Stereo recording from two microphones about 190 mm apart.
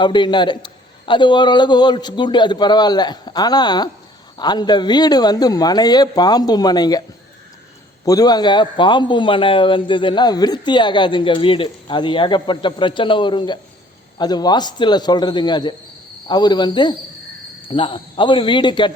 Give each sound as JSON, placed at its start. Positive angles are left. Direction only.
{"t": 0.0, "sound": "a man's voice", "side_deg": 25}
{"t": 8.0, "sound": "a man's voice", "side_deg": 20}